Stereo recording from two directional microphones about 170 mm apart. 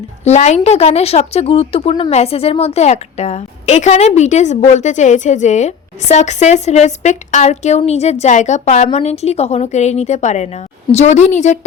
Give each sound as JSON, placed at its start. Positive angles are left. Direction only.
{"t": 0.3, "sound": "a woman's voice", "side_deg": 40}